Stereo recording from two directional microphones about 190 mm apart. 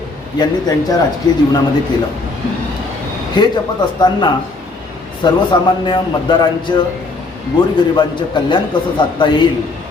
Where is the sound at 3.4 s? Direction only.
25° left (ahead or behind).